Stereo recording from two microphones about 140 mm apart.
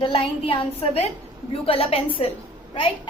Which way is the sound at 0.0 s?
40° left (ahead or behind).